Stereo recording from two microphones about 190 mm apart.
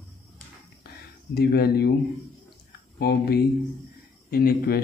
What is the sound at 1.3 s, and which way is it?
Speech, 55° left (ahead or behind).